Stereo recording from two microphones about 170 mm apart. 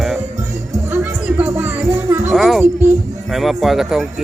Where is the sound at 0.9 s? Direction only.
10° right (ahead or behind).